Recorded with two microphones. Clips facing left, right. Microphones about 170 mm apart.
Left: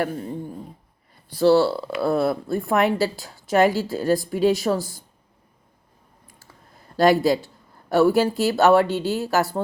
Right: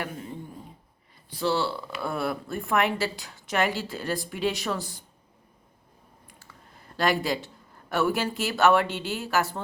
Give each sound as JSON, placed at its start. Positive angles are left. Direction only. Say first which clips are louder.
{"t": 0.0, "sound": "speech", "louder": "left 9 dB", "side_deg": 40}
{"t": 6.9, "sound": "speech", "louder": "left 8 dB", "side_deg": 40}